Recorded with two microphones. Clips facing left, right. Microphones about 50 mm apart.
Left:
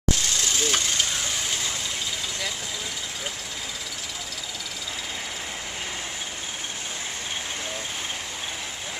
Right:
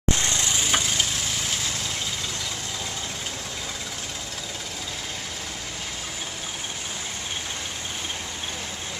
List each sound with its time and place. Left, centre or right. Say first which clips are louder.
0.1 s vehicle: right 1 dB; right
0.6 s vehicle: even; centre